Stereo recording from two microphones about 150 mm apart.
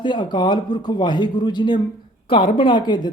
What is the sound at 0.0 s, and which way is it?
Speech, 30° left (ahead or behind).